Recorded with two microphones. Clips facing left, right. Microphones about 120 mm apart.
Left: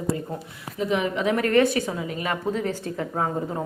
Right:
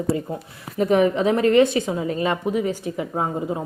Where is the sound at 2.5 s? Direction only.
10° right (ahead or behind).